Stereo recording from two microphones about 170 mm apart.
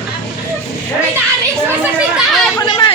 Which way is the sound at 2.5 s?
25° left (ahead or behind).